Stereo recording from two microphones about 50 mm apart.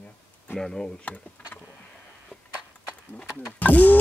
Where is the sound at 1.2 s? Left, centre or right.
Left.